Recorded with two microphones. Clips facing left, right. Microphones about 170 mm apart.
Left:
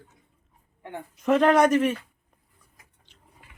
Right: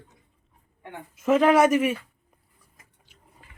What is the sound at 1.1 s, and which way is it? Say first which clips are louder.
Speech: right 1 dB; 5° right (ahead or behind).